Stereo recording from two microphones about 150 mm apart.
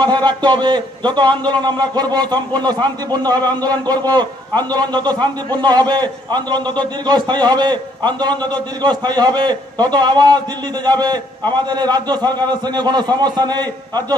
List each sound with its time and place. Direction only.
0.0 s a man's voice: 30° right (ahead or behind)